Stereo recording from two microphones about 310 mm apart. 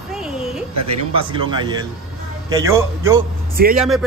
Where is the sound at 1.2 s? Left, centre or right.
Centre.